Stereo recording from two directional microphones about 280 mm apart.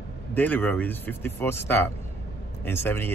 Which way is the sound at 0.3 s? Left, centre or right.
Centre.